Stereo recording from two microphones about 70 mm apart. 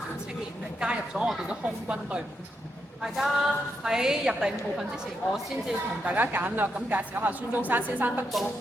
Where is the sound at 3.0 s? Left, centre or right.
Centre.